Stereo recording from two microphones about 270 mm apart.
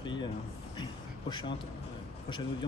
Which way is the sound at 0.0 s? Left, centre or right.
Centre.